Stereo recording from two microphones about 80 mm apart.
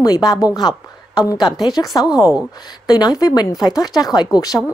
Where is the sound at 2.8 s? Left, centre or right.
Left.